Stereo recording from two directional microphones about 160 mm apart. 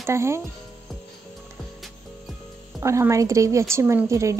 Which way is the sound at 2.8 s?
20° right (ahead or behind).